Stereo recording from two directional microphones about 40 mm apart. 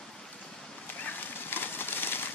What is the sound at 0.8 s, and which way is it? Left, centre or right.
Bird, left.